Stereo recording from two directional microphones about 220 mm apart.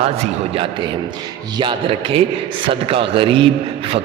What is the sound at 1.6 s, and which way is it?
A man's voice, 20° right (ahead or behind).